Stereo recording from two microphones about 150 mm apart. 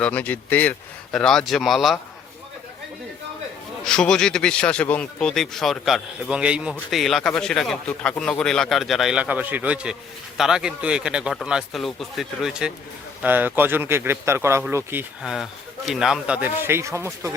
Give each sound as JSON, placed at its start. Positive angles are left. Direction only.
{"t": 0.0, "sound": "speech", "side_deg": 10}
{"t": 3.8, "sound": "speech", "side_deg": 5}
{"t": 15.2, "sound": "speech", "side_deg": -5}